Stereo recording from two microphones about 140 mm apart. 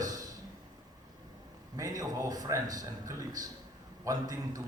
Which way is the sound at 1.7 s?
25° right (ahead or behind).